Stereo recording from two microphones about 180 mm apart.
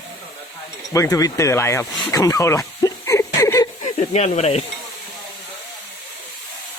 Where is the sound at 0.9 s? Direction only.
20° left (ahead or behind).